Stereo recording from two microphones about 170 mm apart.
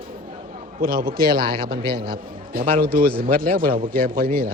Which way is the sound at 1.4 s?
30° right (ahead or behind).